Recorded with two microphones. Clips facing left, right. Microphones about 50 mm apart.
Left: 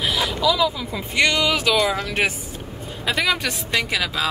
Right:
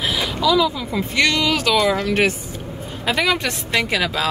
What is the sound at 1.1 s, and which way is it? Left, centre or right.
A woman's voice, centre.